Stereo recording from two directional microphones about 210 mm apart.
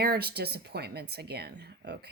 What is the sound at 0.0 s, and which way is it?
A woman's voice, 50° right (ahead or behind).